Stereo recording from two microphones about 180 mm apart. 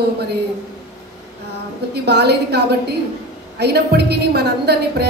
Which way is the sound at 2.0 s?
65° right (ahead or behind).